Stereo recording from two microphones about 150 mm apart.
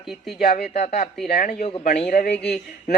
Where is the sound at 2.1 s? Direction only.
90° left.